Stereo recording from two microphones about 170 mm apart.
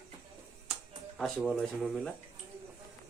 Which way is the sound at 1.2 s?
Centre (ahead or behind).